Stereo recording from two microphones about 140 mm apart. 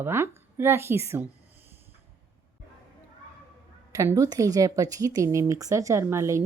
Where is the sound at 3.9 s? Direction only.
20° right (ahead or behind).